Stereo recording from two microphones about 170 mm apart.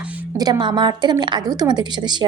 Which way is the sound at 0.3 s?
20° right (ahead or behind).